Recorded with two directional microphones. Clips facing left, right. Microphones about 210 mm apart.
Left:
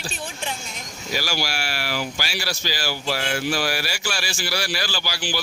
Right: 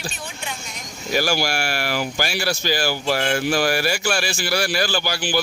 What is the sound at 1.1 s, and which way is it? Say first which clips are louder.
Speech: right 6 dB; 50° right (ahead or behind).